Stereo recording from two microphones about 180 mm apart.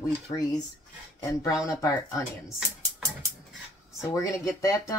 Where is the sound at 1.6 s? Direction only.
20° left (ahead or behind).